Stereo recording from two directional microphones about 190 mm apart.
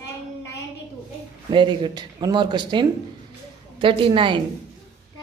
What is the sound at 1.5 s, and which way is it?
Speech, 25° right (ahead or behind).